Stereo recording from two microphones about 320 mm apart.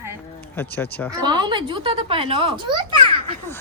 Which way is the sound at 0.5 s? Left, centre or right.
Centre.